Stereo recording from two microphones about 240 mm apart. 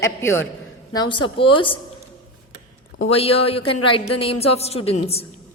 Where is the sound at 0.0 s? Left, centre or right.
Centre.